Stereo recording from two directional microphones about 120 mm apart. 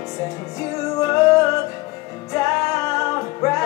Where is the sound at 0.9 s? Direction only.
25° left (ahead or behind).